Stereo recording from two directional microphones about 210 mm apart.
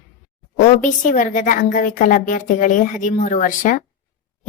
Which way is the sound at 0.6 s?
35° left (ahead or behind).